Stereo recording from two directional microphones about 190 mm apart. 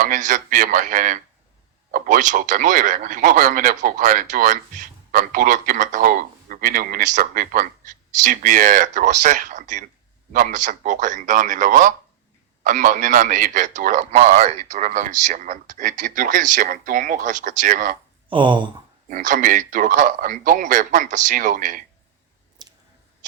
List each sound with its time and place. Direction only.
0.0 s a man's voice: 40° right (ahead or behind)
18.3 s speech: 25° right (ahead or behind)
19.0 s a man's voice: 40° right (ahead or behind)
22.6 s clicking: 20° right (ahead or behind)